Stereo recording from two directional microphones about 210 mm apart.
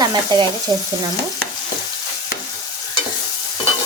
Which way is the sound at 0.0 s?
20° right (ahead or behind).